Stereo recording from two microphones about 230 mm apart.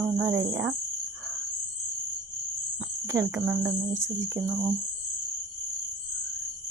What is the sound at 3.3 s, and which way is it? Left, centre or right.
Speech, centre.